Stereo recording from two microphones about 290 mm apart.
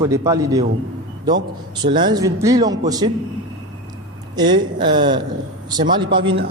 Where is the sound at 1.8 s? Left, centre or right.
Centre.